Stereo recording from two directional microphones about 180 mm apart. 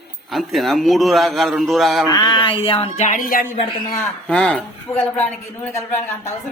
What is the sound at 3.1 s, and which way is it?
Speech, 50° left (ahead or behind).